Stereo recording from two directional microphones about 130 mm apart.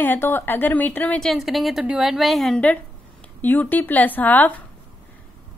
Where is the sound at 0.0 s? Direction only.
15° left (ahead or behind).